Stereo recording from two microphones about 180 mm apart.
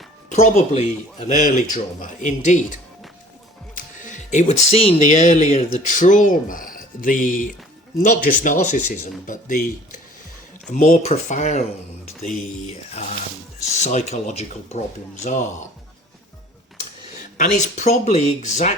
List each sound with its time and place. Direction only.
0.3 s speech: 35° left (ahead or behind)
3.8 s speech: 45° left (ahead or behind)
13.0 s speech: 40° left (ahead or behind)
17.3 s speech: 40° left (ahead or behind)